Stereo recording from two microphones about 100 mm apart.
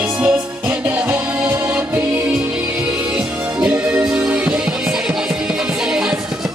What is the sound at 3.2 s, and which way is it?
Music, 10° right (ahead or behind).